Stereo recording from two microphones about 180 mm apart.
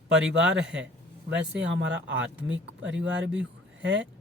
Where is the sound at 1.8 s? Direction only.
90° right.